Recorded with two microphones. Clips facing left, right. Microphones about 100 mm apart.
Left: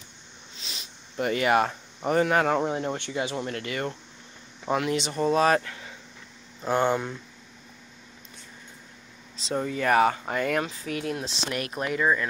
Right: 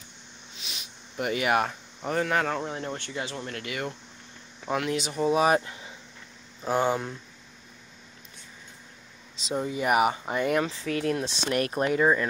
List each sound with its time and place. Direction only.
0.6 s a sound: 5° right (ahead or behind)
2.0 s speech: 5° left (ahead or behind)
2.5 s speech: 20° left (ahead or behind); by 5.6 s 10° right (ahead or behind)
5.6 s speech: 25° right (ahead or behind)
6.6 s speech: 5° right (ahead or behind)
9.5 s speech: 10° right (ahead or behind); by 10.9 s 30° right (ahead or behind)
11.0 s speech: 40° right (ahead or behind)